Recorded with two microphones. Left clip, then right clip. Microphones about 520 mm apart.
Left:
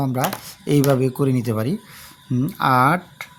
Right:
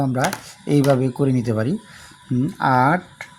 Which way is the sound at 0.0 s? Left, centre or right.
Left.